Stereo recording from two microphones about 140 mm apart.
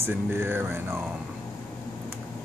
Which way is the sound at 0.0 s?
15° right (ahead or behind).